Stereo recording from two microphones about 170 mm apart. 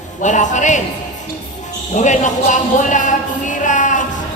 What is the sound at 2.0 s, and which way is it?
Speech, 45° left (ahead or behind).